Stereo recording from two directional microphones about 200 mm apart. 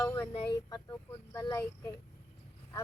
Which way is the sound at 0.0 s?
20° left (ahead or behind).